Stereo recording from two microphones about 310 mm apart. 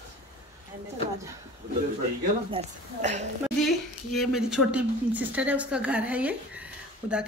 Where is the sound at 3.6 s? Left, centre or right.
Centre.